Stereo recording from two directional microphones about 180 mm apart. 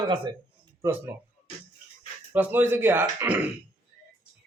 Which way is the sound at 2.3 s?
10° right (ahead or behind).